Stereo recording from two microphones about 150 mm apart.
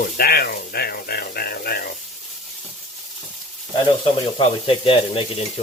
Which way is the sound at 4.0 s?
40° left (ahead or behind).